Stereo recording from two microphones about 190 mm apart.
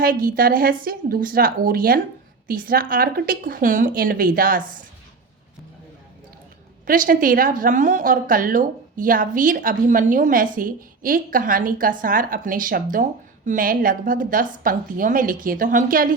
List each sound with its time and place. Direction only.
0.0 s a woman's voice: 50° right (ahead or behind)
6.8 s a woman's voice: 45° right (ahead or behind)